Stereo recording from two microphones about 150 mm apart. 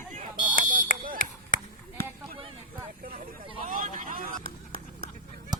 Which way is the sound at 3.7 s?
60° right (ahead or behind).